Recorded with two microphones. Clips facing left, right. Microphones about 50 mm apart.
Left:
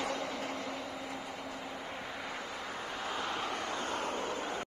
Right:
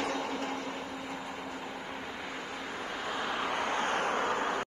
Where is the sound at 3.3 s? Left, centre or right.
Right.